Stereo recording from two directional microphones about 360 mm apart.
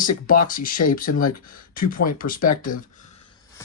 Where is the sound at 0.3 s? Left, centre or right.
Left.